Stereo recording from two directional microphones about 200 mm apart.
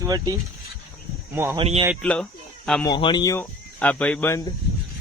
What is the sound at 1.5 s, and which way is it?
Speech, 30° right (ahead or behind).